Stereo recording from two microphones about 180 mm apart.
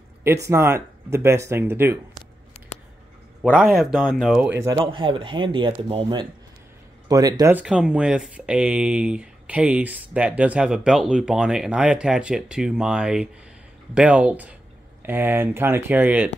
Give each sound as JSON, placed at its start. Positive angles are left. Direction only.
{"t": 0.2, "sound": "speech", "side_deg": -15}
{"t": 3.5, "sound": "speech", "side_deg": 0}